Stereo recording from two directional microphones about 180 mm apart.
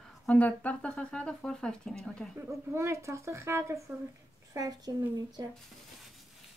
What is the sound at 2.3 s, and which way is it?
Speech, 15° right (ahead or behind).